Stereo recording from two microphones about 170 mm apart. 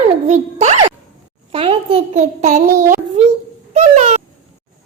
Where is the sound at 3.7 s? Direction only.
40° right (ahead or behind).